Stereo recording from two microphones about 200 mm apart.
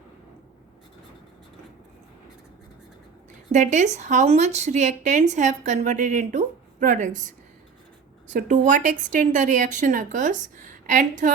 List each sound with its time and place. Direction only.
3.5 s a woman's voice: 35° right (ahead or behind)
8.3 s a woman's voice: 40° right (ahead or behind)